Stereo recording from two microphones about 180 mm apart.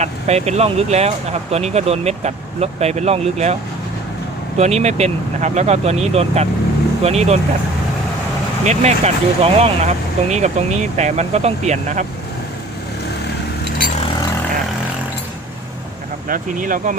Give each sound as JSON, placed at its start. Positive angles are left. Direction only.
{"t": 0.0, "sound": "speech", "side_deg": -35}
{"t": 8.6, "sound": "speech", "side_deg": -40}
{"t": 16.3, "sound": "speech", "side_deg": -50}